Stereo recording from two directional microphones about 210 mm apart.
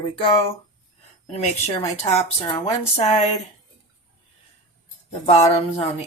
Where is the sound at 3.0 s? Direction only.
35° left (ahead or behind).